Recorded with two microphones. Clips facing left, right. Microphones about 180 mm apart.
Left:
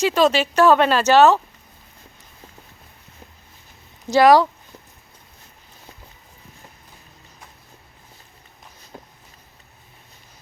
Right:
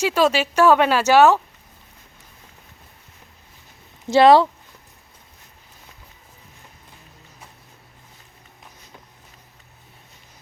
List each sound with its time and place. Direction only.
0.0 s speech: 10° right (ahead or behind)
4.1 s speech: 25° right (ahead or behind)